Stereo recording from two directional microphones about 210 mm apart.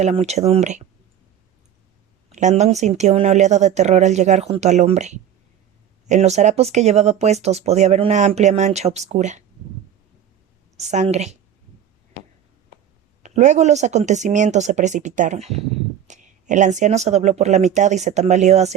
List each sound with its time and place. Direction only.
0.0 s speech: 30° right (ahead or behind)
2.3 s speech: 35° right (ahead or behind)
10.8 s speech: 35° right (ahead or behind)
13.2 s speech: 35° right (ahead or behind)